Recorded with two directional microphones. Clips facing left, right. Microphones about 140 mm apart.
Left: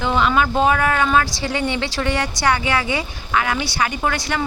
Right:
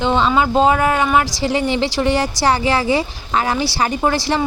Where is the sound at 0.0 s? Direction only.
25° right (ahead or behind).